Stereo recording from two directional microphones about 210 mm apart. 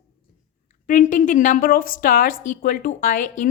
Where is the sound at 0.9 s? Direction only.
40° left (ahead or behind).